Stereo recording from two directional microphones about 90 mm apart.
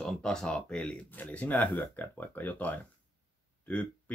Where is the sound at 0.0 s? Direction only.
5° left (ahead or behind).